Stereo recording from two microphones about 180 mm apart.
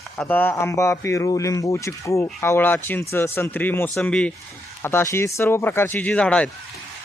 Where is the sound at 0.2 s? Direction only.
10° left (ahead or behind).